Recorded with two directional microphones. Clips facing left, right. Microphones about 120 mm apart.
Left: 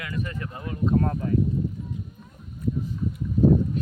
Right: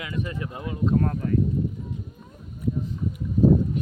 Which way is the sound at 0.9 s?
5° left (ahead or behind).